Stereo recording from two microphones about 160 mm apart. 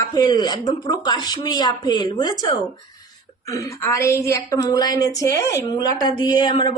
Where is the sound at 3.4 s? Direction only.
20° left (ahead or behind).